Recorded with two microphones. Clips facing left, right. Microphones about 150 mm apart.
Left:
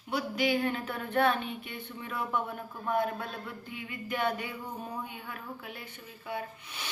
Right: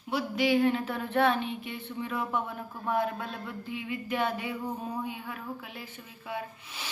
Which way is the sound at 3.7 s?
25° right (ahead or behind).